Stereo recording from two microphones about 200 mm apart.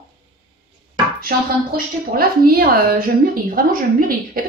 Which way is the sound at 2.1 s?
50° right (ahead or behind).